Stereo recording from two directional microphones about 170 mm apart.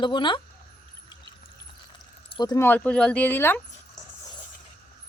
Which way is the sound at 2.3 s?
25° left (ahead or behind).